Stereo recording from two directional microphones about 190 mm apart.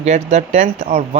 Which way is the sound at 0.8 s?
35° right (ahead or behind).